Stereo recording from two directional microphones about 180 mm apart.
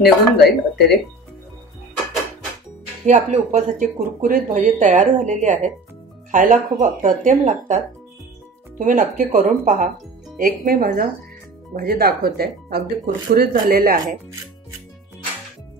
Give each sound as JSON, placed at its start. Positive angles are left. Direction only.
{"t": 0.0, "sound": "speech", "side_deg": 60}
{"t": 3.1, "sound": "speech", "side_deg": -40}